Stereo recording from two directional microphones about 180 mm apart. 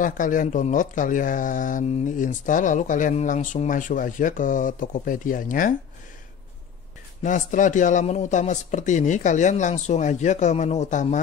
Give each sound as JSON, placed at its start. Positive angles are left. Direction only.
{"t": 0.0, "sound": "speech", "side_deg": 45}
{"t": 7.2, "sound": "speech", "side_deg": 45}